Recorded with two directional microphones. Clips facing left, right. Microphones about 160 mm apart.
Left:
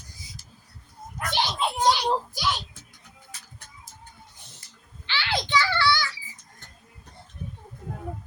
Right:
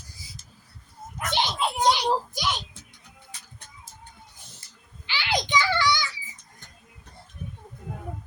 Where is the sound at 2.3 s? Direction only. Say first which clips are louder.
Left 1 dB; 20° right (ahead or behind).